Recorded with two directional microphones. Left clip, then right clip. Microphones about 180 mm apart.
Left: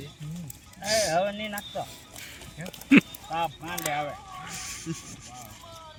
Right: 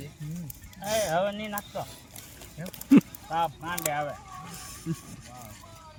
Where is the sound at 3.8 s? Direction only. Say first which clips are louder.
Left 1 dB; 10° right (ahead or behind).